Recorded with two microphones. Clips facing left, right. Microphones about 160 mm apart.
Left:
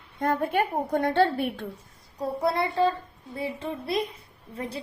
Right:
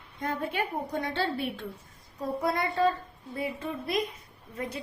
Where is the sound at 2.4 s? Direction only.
30° left (ahead or behind).